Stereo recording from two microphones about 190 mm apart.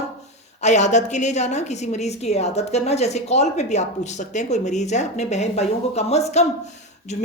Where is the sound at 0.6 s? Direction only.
40° left (ahead or behind).